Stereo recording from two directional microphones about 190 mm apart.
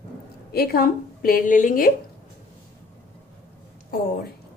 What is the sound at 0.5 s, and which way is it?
A woman's voice, 55° left (ahead or behind).